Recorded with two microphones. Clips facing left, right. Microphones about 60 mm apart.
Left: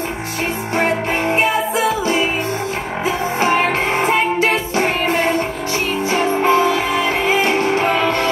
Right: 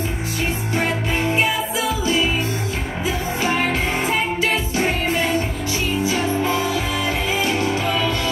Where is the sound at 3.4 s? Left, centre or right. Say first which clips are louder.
Left 5 dB; left.